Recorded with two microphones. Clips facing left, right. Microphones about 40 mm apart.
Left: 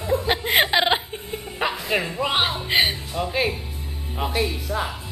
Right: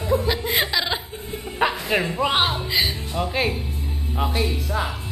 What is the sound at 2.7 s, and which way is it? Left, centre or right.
Speech, left.